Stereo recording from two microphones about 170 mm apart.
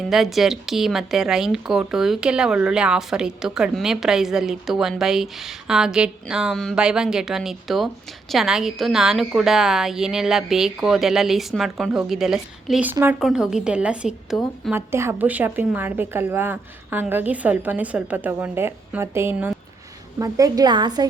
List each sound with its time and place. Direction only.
0.1 s speech: centre (ahead or behind)
14.7 s a woman's voice: 15° right (ahead or behind)